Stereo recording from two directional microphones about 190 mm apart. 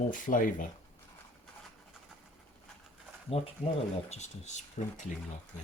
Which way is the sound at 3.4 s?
30° left (ahead or behind).